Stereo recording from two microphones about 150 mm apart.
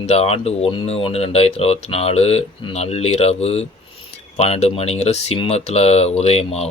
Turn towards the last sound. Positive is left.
turn(degrees=45)  # may be behind; listen again after turning